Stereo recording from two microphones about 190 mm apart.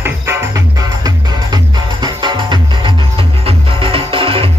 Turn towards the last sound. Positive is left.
turn(degrees=-30)  # may be behind; listen again after turning